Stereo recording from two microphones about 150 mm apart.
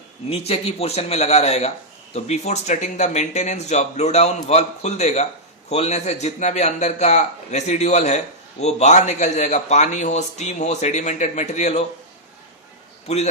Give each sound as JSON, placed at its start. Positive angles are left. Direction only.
{"t": 0.3, "sound": "a man's voice", "side_deg": 40}